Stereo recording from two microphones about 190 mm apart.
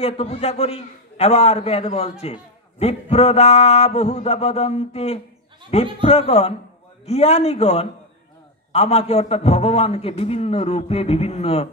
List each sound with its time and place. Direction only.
0.0 s a man's voice: 35° left (ahead or behind)